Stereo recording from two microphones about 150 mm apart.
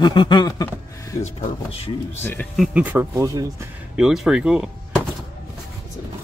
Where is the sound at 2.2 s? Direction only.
15° left (ahead or behind).